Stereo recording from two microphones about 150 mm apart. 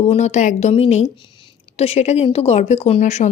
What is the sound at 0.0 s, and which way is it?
A woman's voice, 45° left (ahead or behind).